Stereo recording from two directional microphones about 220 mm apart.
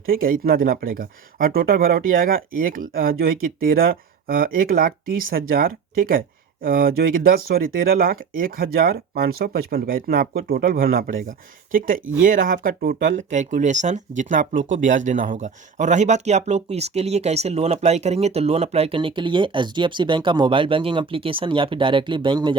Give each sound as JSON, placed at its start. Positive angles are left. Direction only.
{"t": 0.0, "sound": "speech", "side_deg": -40}